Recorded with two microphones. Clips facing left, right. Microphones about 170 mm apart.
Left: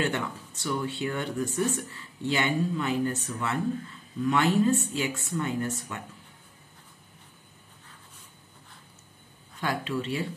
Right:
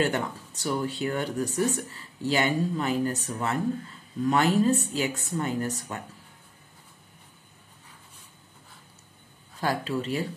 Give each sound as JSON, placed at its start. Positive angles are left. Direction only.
{"t": 0.0, "sound": "speech", "side_deg": -40}
{"t": 9.6, "sound": "speech", "side_deg": -35}